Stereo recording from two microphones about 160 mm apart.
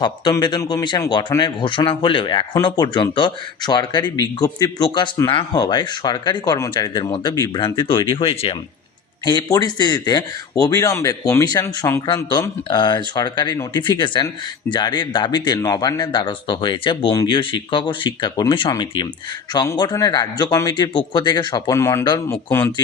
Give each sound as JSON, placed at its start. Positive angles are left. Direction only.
{"t": 0.0, "sound": "speech", "side_deg": 25}
{"t": 9.2, "sound": "speech", "side_deg": 25}
{"t": 12.0, "sound": "speech", "side_deg": 30}